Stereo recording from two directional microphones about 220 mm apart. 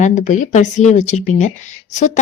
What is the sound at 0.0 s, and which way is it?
A woman's voice, 35° left (ahead or behind).